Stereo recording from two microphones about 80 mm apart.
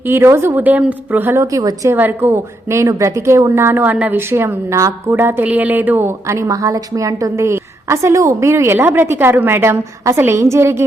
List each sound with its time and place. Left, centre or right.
0.0 s a woman's voice: right
1.4 s speech: right
1.9 s a woman's voice: right
4.3 s a woman's voice: right
5.1 s a woman's voice: right